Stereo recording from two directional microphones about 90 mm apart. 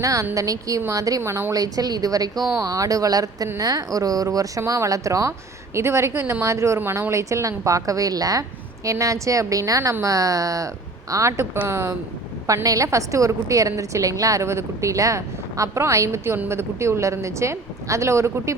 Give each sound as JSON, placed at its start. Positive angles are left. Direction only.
{"t": 0.0, "sound": "a woman's voice", "side_deg": -40}
{"t": 1.2, "sound": "speech", "side_deg": -30}
{"t": 1.5, "sound": "a woman's voice", "side_deg": -45}